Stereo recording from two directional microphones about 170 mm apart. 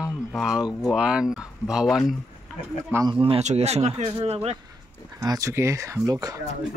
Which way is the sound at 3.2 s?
35° right (ahead or behind).